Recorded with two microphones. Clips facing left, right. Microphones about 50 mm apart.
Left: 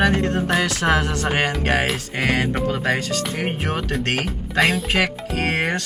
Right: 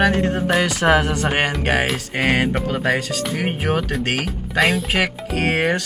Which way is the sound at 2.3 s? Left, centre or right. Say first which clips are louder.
Right 2 dB; centre.